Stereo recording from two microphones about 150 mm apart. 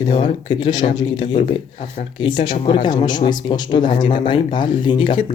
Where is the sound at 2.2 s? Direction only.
30° left (ahead or behind).